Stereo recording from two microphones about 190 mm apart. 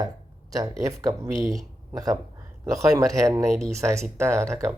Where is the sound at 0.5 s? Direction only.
15° right (ahead or behind).